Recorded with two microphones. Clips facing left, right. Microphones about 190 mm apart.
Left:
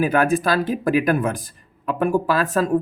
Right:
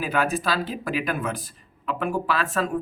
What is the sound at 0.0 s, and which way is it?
Speech, 50° left (ahead or behind).